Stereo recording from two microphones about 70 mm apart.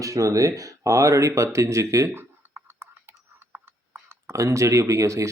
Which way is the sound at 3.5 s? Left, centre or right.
Right.